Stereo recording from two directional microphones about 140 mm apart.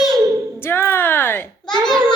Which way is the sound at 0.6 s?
15° left (ahead or behind).